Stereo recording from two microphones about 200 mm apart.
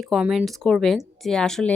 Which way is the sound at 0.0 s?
Centre (ahead or behind).